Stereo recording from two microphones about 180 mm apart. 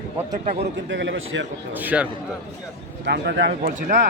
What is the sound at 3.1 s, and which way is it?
Speech, 70° right (ahead or behind).